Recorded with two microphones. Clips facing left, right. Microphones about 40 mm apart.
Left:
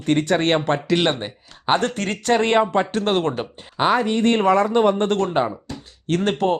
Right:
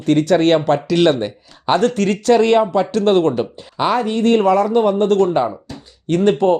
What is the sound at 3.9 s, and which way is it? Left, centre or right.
Speech, left.